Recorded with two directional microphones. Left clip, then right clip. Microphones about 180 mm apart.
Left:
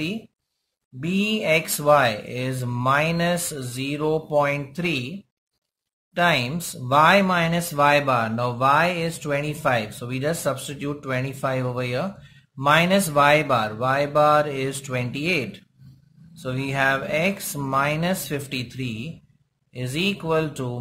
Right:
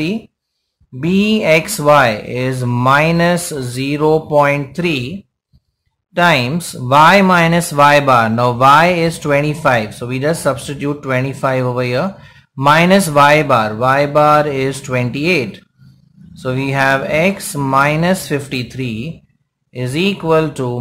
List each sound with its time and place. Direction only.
1.0 s speech: 20° right (ahead or behind)
6.1 s speech: 15° right (ahead or behind)